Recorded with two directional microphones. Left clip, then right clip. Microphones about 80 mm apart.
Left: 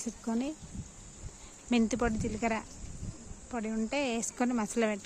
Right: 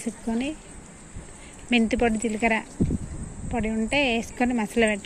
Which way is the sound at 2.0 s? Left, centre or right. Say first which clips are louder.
Right 9 dB; left.